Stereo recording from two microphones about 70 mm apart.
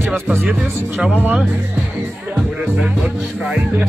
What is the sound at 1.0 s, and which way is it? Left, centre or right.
Speech, right.